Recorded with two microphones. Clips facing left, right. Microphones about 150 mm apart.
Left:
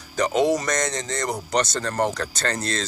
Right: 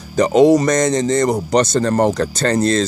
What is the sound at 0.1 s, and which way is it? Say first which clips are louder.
Speech: right 9 dB; 25° right (ahead or behind).